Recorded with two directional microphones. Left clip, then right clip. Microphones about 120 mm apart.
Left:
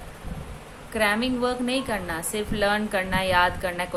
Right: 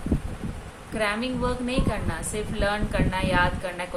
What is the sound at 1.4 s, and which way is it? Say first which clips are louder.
A woman's voice: left 2 dB; 90° left.